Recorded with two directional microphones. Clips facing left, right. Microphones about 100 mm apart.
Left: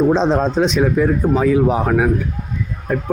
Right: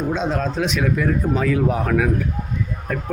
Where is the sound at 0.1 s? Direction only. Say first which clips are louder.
Left 7 dB; 30° left (ahead or behind).